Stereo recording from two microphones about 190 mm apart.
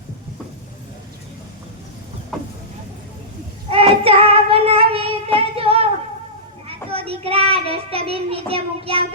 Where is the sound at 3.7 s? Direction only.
30° right (ahead or behind).